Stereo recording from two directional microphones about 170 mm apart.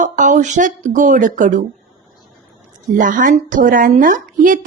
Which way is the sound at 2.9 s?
50° right (ahead or behind).